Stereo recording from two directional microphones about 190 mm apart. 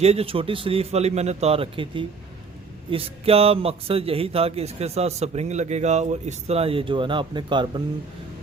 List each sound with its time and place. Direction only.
0.0 s a man's voice: 30° right (ahead or behind)